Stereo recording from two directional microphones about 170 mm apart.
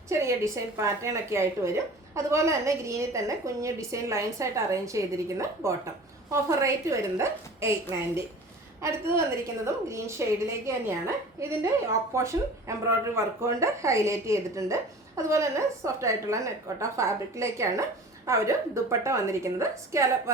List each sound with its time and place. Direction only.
0.1 s a woman's voice: 15° right (ahead or behind)